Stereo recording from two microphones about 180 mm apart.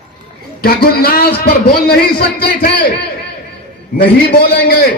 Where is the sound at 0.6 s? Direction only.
60° left (ahead or behind).